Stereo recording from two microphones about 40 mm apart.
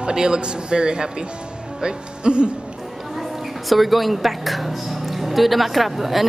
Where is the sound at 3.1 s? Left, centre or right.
Centre.